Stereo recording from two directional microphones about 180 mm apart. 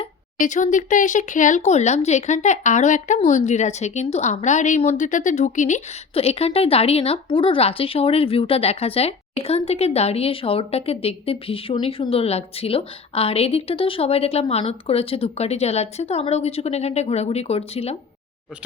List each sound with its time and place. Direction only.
0.3 s speech: 45° left (ahead or behind)